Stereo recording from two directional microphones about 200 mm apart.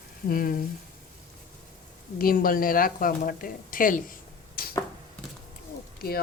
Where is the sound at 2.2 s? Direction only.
45° left (ahead or behind).